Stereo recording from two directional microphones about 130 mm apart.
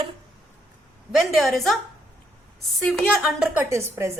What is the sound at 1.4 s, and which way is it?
Speech, centre (ahead or behind).